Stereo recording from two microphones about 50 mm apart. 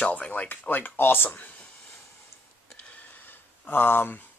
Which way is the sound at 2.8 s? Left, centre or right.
Left.